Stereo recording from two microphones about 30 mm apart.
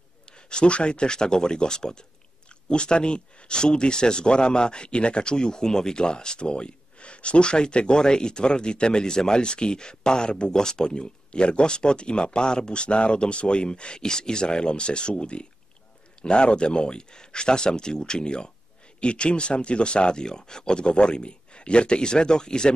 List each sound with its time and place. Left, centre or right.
0.5 s speech: left